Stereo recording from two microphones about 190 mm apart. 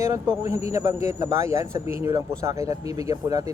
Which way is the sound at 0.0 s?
15° right (ahead or behind).